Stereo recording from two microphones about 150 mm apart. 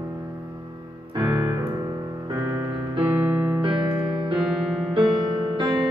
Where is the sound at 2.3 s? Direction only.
20° right (ahead or behind).